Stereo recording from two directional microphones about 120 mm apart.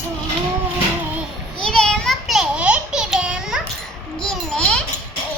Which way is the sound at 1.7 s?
5° left (ahead or behind).